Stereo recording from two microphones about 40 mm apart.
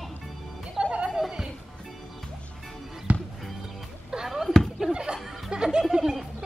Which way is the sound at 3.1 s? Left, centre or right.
Right.